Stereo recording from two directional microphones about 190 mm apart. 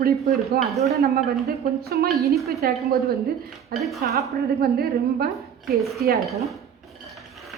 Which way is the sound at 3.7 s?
Centre (ahead or behind).